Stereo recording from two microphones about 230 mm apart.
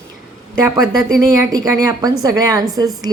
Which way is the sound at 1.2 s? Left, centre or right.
Centre.